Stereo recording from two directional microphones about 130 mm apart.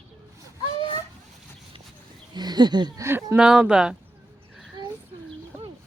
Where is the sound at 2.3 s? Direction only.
35° right (ahead or behind).